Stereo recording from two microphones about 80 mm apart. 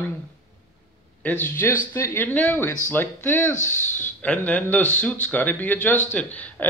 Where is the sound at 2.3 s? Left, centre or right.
Centre.